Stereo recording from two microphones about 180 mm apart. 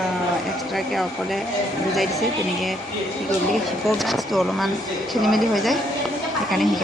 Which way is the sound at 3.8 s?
Centre (ahead or behind).